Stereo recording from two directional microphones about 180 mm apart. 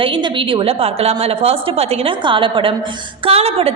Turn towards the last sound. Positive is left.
turn(degrees=-35)  # may be behind; listen again after turning